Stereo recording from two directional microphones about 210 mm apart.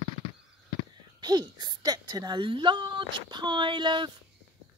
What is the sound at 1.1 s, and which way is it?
A woman's voice, 20° right (ahead or behind).